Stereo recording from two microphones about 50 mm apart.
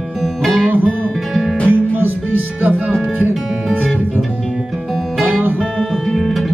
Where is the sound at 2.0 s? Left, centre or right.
Right.